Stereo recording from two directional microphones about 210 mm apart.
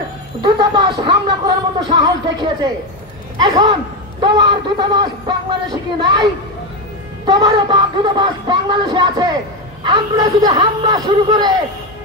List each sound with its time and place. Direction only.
0.4 s a sound: 20° right (ahead or behind)
1.9 s speech: 20° right (ahead or behind)
7.2 s speech: 20° right (ahead or behind)